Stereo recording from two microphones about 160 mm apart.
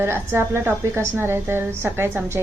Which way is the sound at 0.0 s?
15° right (ahead or behind).